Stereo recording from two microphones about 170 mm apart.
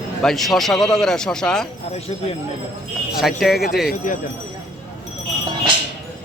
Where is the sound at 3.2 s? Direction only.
Centre (ahead or behind).